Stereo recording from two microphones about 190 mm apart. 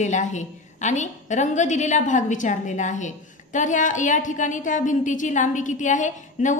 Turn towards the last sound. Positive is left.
turn(degrees=40)  # may be behind; listen again after turning